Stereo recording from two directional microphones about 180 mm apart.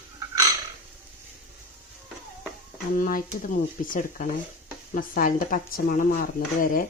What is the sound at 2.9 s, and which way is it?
A woman's voice, 50° left (ahead or behind).